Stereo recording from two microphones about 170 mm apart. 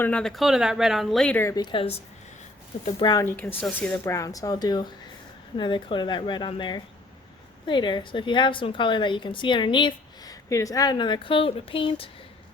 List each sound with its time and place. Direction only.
0.0 s speech: 5° left (ahead or behind); by 2.0 s 30° left (ahead or behind)
3.0 s a woman's voice: 25° left (ahead or behind)
3.2 s a woman's voice: 10° left (ahead or behind); by 12.0 s 30° left (ahead or behind)